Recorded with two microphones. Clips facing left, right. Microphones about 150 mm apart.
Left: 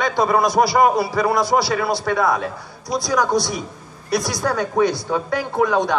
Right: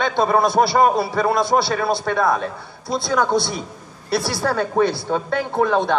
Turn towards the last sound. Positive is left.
turn(degrees=-30)  # may be behind; listen again after turning